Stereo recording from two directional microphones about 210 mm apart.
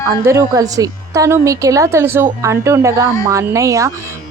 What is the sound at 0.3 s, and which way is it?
A woman's voice, 15° right (ahead or behind).